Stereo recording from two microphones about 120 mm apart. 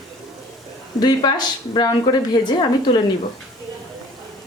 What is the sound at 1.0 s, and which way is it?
A woman's voice, 35° left (ahead or behind).